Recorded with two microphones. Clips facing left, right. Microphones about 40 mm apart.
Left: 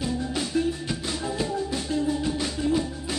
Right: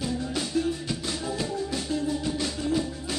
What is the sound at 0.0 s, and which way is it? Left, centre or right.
Music, centre.